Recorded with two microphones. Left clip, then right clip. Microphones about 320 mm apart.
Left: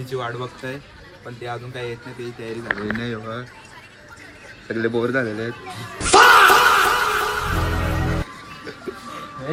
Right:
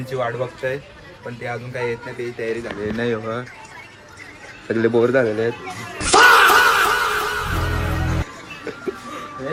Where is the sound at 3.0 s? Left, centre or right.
Right.